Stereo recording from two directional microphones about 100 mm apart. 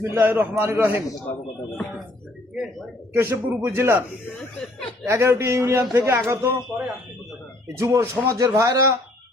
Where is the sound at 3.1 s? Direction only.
20° right (ahead or behind).